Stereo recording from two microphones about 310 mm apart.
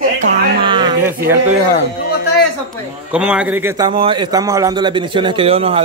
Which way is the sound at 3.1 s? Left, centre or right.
Centre.